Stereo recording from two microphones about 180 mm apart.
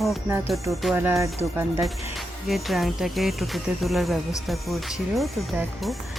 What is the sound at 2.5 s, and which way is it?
Speech, centre (ahead or behind).